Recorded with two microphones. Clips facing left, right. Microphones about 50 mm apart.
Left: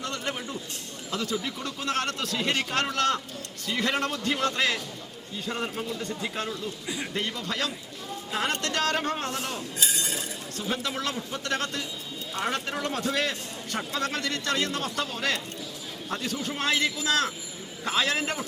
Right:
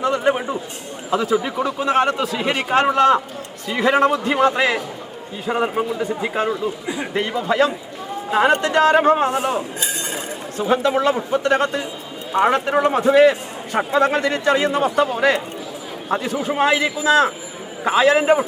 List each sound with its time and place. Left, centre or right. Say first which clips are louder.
0.0 s a sound: right 14 dB; centre
1.1 s a man's voice: right 12 dB; centre
6.8 s a man's voice: right 8 dB; right